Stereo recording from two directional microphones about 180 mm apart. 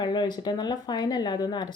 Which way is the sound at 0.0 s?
25° left (ahead or behind).